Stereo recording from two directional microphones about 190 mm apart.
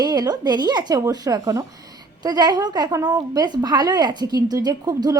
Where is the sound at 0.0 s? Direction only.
20° right (ahead or behind).